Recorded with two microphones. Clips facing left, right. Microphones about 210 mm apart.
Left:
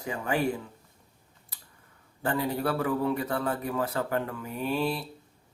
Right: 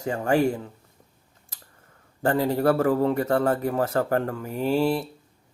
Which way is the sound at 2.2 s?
45° right (ahead or behind).